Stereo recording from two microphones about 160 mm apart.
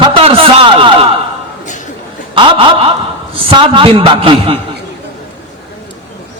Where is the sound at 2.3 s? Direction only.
35° right (ahead or behind).